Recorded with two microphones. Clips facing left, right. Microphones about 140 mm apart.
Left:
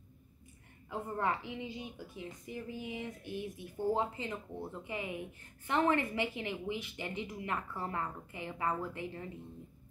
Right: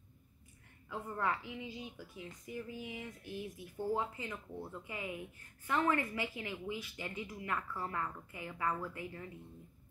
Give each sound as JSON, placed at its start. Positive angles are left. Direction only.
{"t": 0.8, "sound": "a woman's voice", "side_deg": 25}